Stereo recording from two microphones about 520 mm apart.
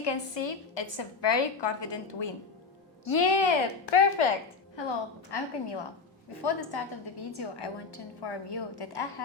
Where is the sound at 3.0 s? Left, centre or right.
Left.